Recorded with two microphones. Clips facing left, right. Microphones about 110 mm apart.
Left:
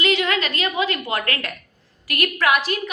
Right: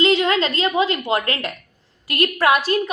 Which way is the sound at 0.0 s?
30° right (ahead or behind).